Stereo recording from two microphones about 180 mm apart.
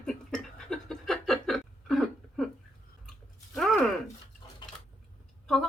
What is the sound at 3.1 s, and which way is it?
Chewing, centre (ahead or behind).